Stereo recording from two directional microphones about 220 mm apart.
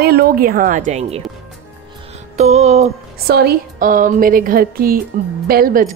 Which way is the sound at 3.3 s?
45° right (ahead or behind).